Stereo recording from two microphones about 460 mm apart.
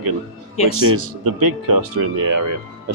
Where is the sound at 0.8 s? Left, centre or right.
Right.